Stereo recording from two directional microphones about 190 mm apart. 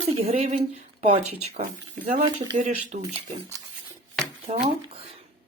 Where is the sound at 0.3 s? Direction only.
35° right (ahead or behind).